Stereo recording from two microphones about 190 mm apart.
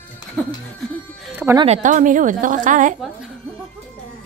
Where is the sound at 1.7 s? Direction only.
40° right (ahead or behind).